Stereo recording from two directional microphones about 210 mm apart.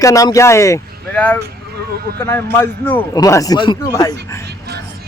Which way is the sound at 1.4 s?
50° right (ahead or behind).